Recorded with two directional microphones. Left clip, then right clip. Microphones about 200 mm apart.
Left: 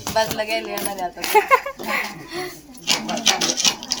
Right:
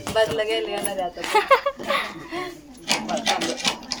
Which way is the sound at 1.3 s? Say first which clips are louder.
Left 2 dB; 5° right (ahead or behind).